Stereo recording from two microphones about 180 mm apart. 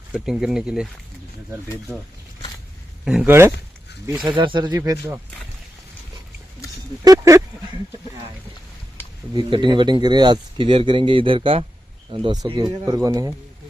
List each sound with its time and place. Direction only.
0.1 s speech: 5° right (ahead or behind)
3.0 s speech: 5° right (ahead or behind)
4.3 s speech: 25° right (ahead or behind)
7.0 s speech: 20° right (ahead or behind)
9.3 s speech: 25° right (ahead or behind)